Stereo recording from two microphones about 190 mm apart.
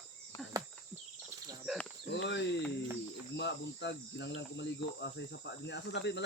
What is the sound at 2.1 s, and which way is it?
Speech, 70° left (ahead or behind).